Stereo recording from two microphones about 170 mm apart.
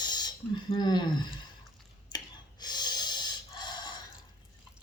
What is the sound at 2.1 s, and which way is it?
Gasp, 25° left (ahead or behind).